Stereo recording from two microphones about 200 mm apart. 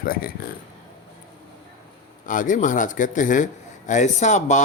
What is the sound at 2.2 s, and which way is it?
A man's voice, 40° left (ahead or behind).